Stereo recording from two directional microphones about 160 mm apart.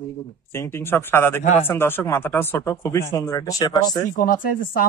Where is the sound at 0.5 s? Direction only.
15° left (ahead or behind).